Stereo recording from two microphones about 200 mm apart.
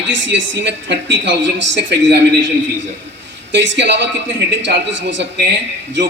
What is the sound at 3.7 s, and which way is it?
A man's voice, 60° right (ahead or behind).